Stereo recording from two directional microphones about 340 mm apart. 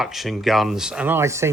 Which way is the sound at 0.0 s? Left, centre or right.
Centre.